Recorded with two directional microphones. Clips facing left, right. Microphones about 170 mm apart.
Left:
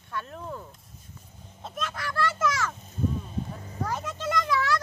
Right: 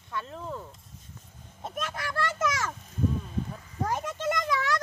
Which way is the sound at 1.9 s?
20° right (ahead or behind).